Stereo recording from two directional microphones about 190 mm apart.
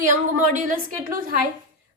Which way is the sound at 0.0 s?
45° right (ahead or behind).